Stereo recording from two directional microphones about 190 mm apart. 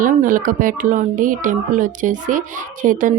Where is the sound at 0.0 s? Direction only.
45° right (ahead or behind).